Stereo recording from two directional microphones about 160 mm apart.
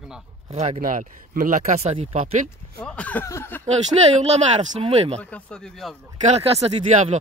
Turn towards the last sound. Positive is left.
turn(degrees=-45)  # may be behind; listen again after turning